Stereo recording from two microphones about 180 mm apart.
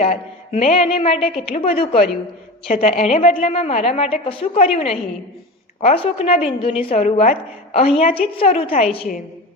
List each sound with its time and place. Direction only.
0.0 s a woman's voice: 40° left (ahead or behind)